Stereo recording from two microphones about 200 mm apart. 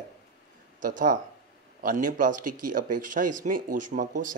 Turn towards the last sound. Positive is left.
turn(degrees=-40)  # may be behind; listen again after turning